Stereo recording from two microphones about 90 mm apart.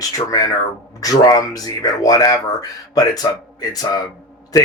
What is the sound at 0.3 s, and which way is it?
Speech, 45° left (ahead or behind).